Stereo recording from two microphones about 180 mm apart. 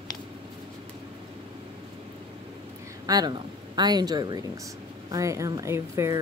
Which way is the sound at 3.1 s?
20° right (ahead or behind).